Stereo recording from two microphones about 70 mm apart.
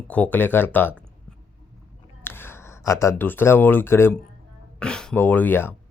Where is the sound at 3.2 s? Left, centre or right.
Left.